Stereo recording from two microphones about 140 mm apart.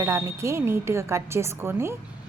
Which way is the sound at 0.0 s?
20° right (ahead or behind).